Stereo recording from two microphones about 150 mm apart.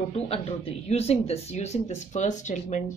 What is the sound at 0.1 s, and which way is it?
Speech, 40° left (ahead or behind).